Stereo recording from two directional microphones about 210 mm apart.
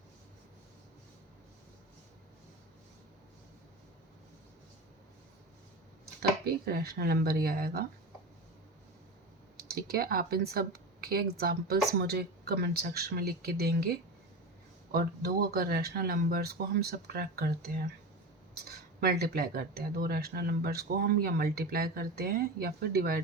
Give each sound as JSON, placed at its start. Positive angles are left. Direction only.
{"t": 6.4, "sound": "speech", "side_deg": -45}
{"t": 9.6, "sound": "speech", "side_deg": -45}
{"t": 18.9, "sound": "speech", "side_deg": -50}